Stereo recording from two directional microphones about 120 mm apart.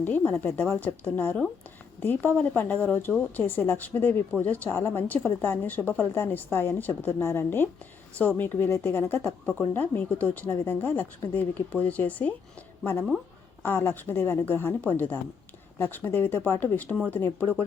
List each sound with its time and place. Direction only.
0.0 s speech: 15° left (ahead or behind)